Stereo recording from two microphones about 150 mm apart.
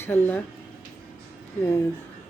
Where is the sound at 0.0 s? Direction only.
15° left (ahead or behind).